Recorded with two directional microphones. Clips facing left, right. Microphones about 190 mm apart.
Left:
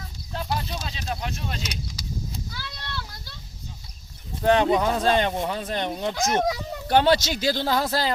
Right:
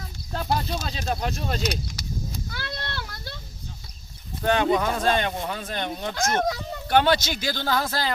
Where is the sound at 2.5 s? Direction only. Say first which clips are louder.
Right 4 dB; 60° right (ahead or behind).